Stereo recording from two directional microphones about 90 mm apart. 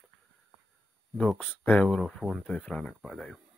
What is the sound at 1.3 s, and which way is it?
Speech, 15° left (ahead or behind).